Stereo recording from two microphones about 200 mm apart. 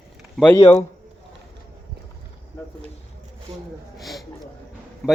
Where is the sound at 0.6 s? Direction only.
30° left (ahead or behind).